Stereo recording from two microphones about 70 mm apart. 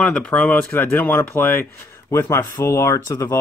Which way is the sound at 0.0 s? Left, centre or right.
Centre.